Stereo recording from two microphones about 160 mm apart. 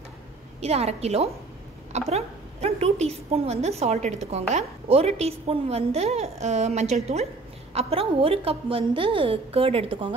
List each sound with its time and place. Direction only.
0.6 s a woman's voice: 40° right (ahead or behind)